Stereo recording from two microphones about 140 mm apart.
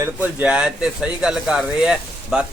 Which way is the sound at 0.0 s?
10° right (ahead or behind).